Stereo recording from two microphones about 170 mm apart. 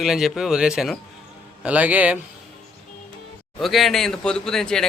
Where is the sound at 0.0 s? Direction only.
Centre (ahead or behind).